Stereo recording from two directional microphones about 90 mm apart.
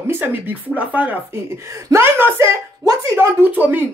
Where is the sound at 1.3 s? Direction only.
30° right (ahead or behind).